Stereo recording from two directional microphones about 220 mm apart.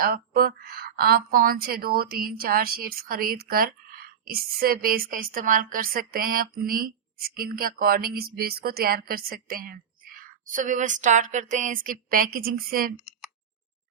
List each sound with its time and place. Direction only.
0.0 s a woman's voice: 40° right (ahead or behind)